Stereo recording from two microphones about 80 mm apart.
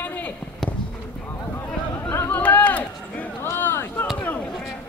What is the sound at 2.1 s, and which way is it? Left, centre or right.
Chatter, left.